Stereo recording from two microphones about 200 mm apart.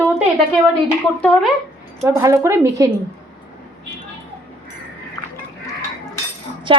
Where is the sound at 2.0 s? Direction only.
15° right (ahead or behind).